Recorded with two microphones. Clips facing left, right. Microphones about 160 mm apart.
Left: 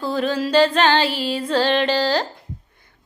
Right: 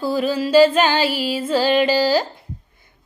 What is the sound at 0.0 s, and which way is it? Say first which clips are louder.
Female singing: right 2 dB; 5° right (ahead or behind).